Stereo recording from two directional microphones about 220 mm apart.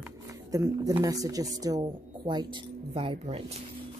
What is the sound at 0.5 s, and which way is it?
Speech, 15° right (ahead or behind).